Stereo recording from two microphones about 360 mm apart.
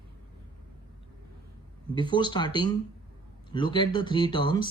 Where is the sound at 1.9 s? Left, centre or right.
Centre.